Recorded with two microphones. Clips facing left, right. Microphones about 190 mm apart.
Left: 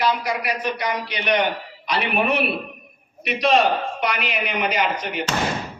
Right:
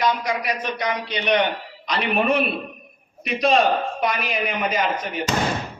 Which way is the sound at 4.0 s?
70° left (ahead or behind).